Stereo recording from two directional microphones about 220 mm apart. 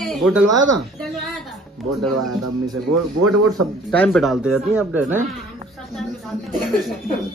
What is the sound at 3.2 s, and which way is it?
Speech, 90° right.